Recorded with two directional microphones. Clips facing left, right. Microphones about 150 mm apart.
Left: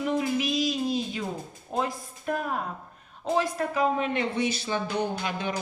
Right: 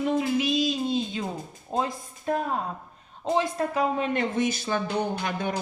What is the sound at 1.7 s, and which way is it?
Speech, 25° right (ahead or behind).